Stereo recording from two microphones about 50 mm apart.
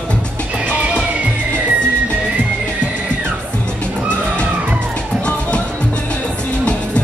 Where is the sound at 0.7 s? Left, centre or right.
Right.